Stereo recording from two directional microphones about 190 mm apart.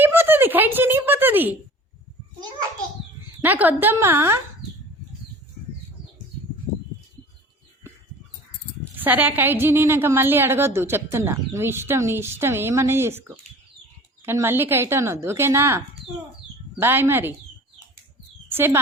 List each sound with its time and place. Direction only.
0.0 s a sound: 10° right (ahead or behind)
3.4 s a woman's voice: 10° right (ahead or behind)
9.0 s a woman's voice: 10° right (ahead or behind)
16.8 s a woman's voice: 10° right (ahead or behind)
18.5 s speech: 10° right (ahead or behind)